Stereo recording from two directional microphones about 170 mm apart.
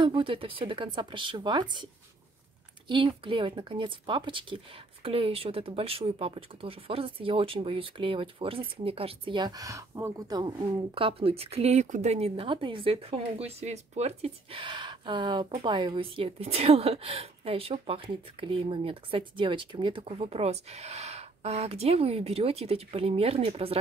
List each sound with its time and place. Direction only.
0.0 s speech: 30° right (ahead or behind)
2.9 s speech: 30° right (ahead or behind)
11.0 s speech: 35° right (ahead or behind)